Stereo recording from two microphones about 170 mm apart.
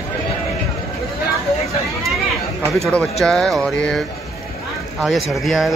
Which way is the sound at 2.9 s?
5° left (ahead or behind).